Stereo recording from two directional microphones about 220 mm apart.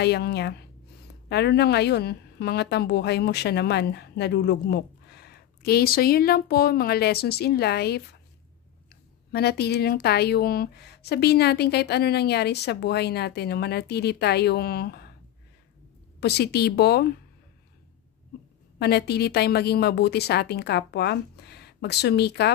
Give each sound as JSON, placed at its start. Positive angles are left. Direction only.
{"t": 0.0, "sound": "a woman's voice", "side_deg": 50}
{"t": 9.3, "sound": "a woman's voice", "side_deg": 45}
{"t": 16.2, "sound": "a woman's voice", "side_deg": 50}
{"t": 18.8, "sound": "a woman's voice", "side_deg": 45}